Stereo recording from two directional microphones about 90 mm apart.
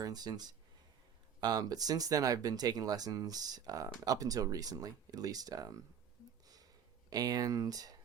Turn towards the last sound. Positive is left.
turn(degrees=-45)  # may be behind; listen again after turning